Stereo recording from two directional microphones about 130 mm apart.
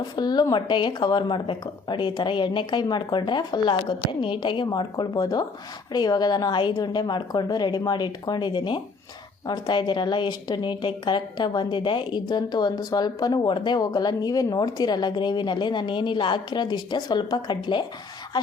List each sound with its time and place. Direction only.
0.0 s a woman's voice: 30° left (ahead or behind)